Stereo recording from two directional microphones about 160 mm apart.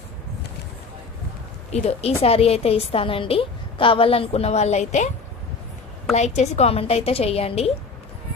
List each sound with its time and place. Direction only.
1.7 s a woman's voice: 40° left (ahead or behind)
6.1 s a woman's voice: 45° left (ahead or behind)